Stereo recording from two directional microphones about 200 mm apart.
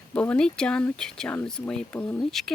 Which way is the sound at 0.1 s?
5° left (ahead or behind).